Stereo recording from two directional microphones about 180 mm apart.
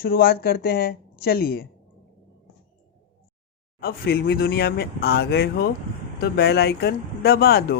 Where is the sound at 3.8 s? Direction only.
55° left (ahead or behind).